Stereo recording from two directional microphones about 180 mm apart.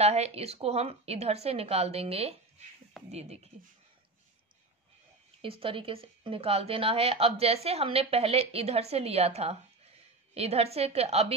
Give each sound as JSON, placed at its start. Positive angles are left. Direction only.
{"t": 0.0, "sound": "a woman's voice", "side_deg": -35}
{"t": 5.4, "sound": "a woman's voice", "side_deg": -30}